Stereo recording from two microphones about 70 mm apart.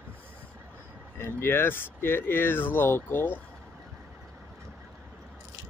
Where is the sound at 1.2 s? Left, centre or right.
Left.